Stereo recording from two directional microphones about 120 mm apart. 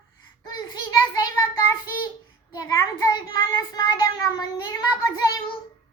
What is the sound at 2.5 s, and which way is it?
Child singing, 30° left (ahead or behind).